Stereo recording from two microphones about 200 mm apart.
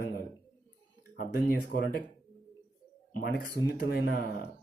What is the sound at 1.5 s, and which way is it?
Speech, 50° left (ahead or behind).